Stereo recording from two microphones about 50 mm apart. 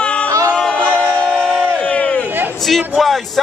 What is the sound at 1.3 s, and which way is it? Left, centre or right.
Crowd, centre.